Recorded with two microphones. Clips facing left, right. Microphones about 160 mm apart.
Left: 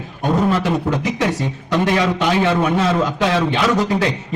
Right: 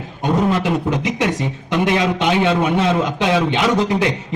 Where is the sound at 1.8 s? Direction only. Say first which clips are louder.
Right 1 dB; 20° right (ahead or behind).